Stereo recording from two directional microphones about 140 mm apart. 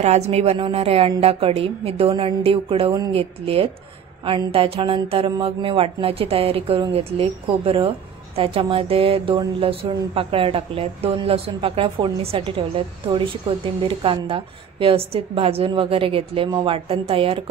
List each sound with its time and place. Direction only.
0.0 s a woman's voice: 50° right (ahead or behind)